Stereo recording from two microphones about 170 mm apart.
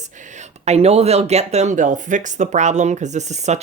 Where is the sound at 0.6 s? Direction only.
40° right (ahead or behind).